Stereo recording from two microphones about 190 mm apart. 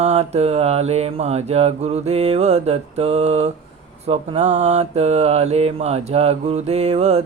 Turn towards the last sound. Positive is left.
turn(degrees=-35)  # may be behind; listen again after turning